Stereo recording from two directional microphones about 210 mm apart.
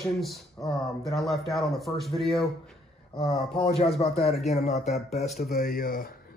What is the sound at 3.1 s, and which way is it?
Speech, 30° left (ahead or behind).